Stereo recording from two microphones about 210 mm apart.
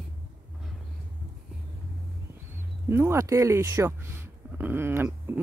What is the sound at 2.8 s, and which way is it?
Speech, 10° right (ahead or behind).